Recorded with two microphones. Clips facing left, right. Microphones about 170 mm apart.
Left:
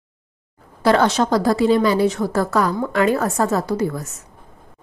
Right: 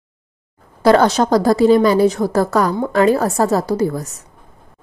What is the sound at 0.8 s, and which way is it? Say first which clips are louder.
A woman's voice: right 4 dB; 40° right (ahead or behind).